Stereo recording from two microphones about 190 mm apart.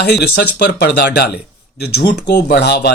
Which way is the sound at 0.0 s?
60° left (ahead or behind).